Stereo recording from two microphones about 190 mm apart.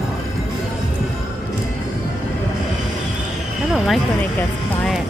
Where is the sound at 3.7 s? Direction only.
Centre (ahead or behind).